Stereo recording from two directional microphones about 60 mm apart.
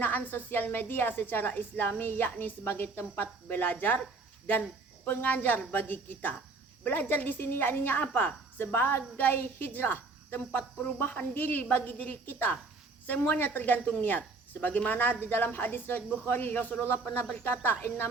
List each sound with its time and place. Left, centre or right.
0.0 s a woman's voice: left
5.0 s a woman's voice: left